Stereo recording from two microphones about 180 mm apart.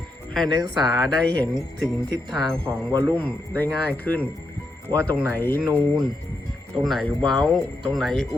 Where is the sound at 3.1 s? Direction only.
10° left (ahead or behind).